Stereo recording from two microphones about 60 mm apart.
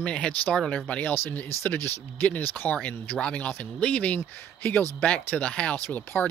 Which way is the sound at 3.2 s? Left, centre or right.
Left.